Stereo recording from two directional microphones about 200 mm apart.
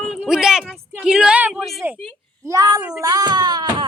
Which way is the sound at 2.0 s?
5° left (ahead or behind).